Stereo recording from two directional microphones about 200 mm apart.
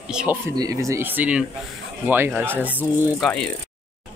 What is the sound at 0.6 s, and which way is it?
Speech, 15° right (ahead or behind).